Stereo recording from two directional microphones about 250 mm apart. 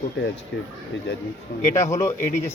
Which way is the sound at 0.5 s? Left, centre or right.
Left.